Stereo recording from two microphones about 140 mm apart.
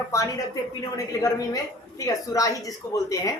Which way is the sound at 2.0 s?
25° left (ahead or behind).